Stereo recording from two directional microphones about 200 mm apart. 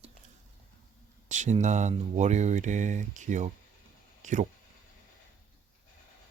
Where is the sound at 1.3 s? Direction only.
35° right (ahead or behind).